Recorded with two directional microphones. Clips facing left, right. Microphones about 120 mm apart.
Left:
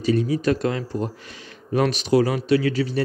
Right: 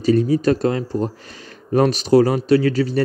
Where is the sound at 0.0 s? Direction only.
40° right (ahead or behind).